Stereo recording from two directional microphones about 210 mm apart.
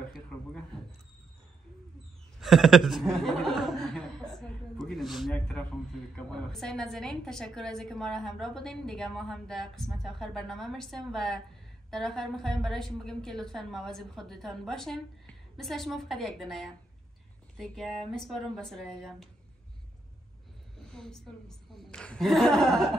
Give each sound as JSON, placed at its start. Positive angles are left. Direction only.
{"t": 0.1, "sound": "a sound", "side_deg": 5}
{"t": 2.4, "sound": "a woman's voice", "side_deg": 0}
{"t": 20.8, "sound": "a woman's voice", "side_deg": 5}